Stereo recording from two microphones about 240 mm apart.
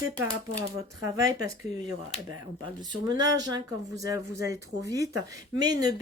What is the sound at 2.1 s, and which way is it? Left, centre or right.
Speech, left.